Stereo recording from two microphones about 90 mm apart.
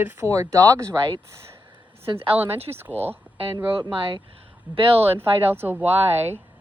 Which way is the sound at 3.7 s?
60° right (ahead or behind).